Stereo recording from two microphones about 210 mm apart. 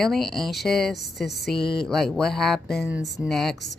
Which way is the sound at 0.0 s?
Centre (ahead or behind).